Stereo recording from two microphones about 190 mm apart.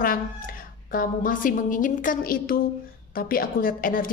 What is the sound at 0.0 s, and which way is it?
A woman's voice, 50° left (ahead or behind).